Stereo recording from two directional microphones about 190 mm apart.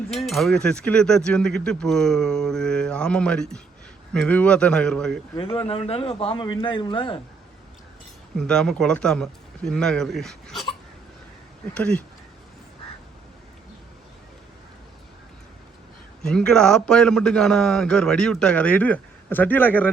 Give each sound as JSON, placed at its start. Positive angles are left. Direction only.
{"t": 0.3, "sound": "a man's voice", "side_deg": 0}
{"t": 5.4, "sound": "a man's voice", "side_deg": 30}
{"t": 8.4, "sound": "a man's voice", "side_deg": 5}
{"t": 11.7, "sound": "speech", "side_deg": 5}
{"t": 16.2, "sound": "a man's voice", "side_deg": 5}